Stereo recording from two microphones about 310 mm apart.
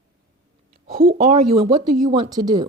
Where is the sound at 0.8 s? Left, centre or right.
Right.